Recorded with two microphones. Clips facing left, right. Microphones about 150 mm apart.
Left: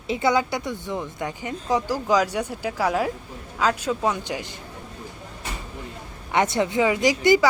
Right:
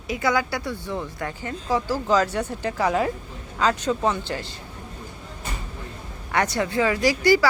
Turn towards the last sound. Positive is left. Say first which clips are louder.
# left 1 dB
turn(degrees=20)  # may be behind; listen again after turning